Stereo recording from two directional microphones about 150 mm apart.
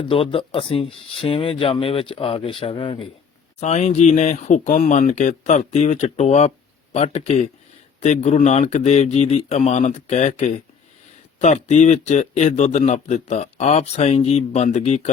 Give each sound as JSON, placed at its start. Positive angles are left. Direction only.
{"t": 0.0, "sound": "speech", "side_deg": 40}
{"t": 3.6, "sound": "a man's voice", "side_deg": 50}